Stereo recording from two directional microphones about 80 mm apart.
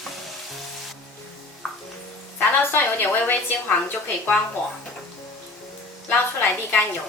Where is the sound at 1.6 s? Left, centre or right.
Centre.